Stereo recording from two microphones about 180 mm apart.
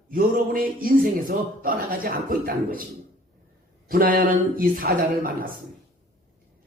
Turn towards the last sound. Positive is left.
turn(degrees=-50)  # may be behind; listen again after turning